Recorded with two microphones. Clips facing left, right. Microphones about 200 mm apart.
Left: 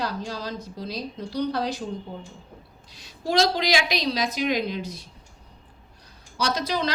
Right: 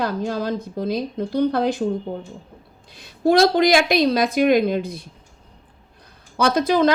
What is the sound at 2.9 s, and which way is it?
A woman's voice, 55° right (ahead or behind).